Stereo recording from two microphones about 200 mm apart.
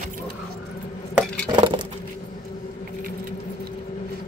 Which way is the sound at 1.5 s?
25° right (ahead or behind).